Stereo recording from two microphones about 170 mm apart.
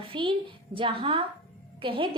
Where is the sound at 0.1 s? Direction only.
30° right (ahead or behind).